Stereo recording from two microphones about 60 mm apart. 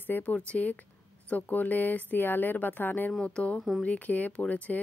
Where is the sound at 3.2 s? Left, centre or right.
Centre.